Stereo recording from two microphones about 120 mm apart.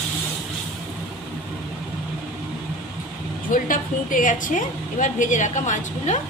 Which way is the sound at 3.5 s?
90° left.